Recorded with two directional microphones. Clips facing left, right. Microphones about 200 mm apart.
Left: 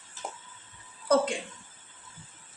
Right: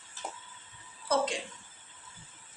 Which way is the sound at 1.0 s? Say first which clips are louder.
Left 5 dB; 55° left (ahead or behind).